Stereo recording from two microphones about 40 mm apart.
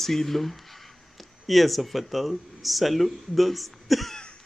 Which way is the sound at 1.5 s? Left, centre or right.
Centre.